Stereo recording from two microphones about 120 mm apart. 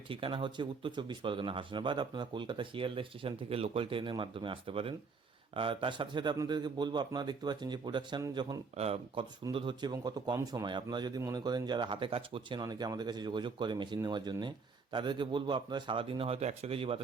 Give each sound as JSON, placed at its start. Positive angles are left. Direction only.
{"t": 0.1, "sound": "speech", "side_deg": -45}
{"t": 8.7, "sound": "speech", "side_deg": -55}
{"t": 9.5, "sound": "speech", "side_deg": -45}